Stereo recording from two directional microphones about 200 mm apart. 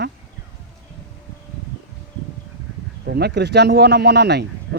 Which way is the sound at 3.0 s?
55° right (ahead or behind).